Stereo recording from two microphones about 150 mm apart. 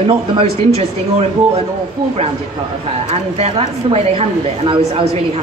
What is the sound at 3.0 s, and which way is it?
A woman's voice, 45° right (ahead or behind).